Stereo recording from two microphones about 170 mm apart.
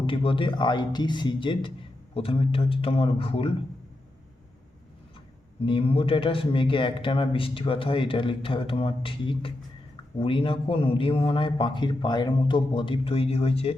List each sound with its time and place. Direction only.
0.0 s a man's voice: 30° left (ahead or behind)
5.6 s a man's voice: 30° left (ahead or behind)